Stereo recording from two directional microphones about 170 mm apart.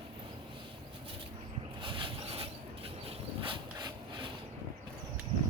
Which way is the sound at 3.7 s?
25° right (ahead or behind).